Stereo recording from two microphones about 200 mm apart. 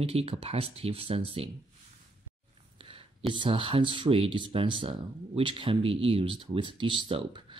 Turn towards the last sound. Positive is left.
turn(degrees=-25)  # may be behind; listen again after turning